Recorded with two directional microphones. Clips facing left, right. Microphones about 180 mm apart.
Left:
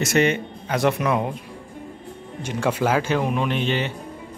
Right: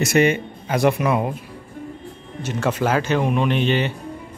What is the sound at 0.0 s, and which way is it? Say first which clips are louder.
Speech: right 2 dB; 10° right (ahead or behind).